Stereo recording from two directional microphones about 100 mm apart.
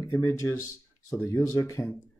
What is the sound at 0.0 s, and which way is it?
Speech, 30° left (ahead or behind).